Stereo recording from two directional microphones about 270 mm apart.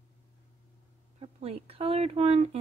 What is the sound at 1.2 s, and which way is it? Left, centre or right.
Speech, right.